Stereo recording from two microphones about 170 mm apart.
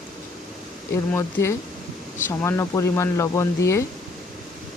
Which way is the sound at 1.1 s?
15° left (ahead or behind).